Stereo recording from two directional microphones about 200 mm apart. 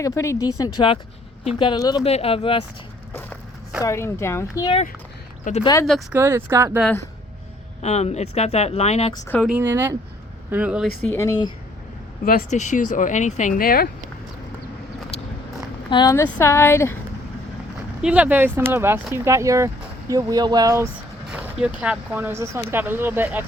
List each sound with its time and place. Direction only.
0.0 s a woman's voice: 15° left (ahead or behind)
1.5 s speech: 20° left (ahead or behind)
3.1 s a sound: 10° left (ahead or behind)
3.8 s a woman's voice: 15° left (ahead or behind)
5.5 s speech: 40° left (ahead or behind)
5.8 s speech: centre (ahead or behind)
6.1 s speech: 10° right (ahead or behind)
7.8 s speech: 35° left (ahead or behind)
9.4 s speech: 5° right (ahead or behind)
11.0 s a woman's voice: 10° left (ahead or behind)
12.2 s speech: 45° left (ahead or behind)
15.9 s a woman's voice: 20° left (ahead or behind)
18.0 s speech: 5° right (ahead or behind)